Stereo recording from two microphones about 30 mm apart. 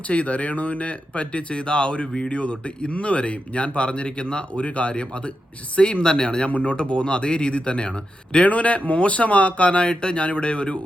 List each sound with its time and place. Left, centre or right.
0.1 s speech: left
4.6 s speech: left
6.4 s speech: left
8.4 s speech: left
9.9 s speech: left